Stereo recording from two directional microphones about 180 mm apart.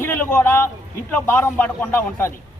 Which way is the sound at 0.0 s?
10° left (ahead or behind).